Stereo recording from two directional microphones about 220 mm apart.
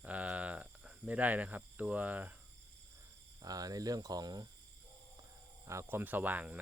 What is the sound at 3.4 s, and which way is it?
Speech, 15° right (ahead or behind).